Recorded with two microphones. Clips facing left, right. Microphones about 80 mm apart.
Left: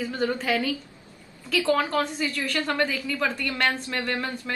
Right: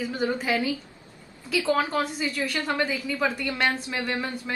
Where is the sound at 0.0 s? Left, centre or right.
Centre.